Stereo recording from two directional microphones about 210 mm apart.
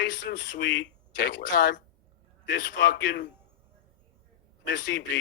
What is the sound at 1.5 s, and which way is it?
Speech, 40° left (ahead or behind).